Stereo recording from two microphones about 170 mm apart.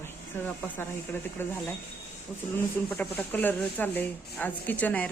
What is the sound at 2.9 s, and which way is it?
A woman's voice, 10° left (ahead or behind).